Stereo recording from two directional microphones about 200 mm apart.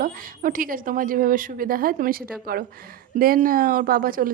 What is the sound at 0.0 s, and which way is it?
Speech, 45° right (ahead or behind).